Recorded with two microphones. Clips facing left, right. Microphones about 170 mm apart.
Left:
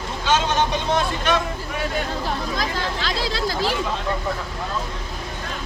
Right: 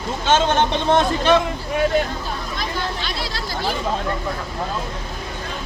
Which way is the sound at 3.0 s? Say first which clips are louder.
Left 4 dB; 90° left.